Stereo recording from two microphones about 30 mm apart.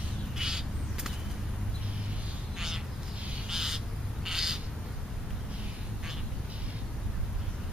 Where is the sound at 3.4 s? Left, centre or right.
Centre.